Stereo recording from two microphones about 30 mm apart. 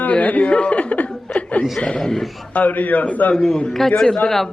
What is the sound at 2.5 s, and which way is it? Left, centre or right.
Speech, left.